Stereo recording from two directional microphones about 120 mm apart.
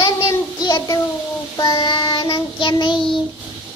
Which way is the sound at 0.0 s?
30° left (ahead or behind).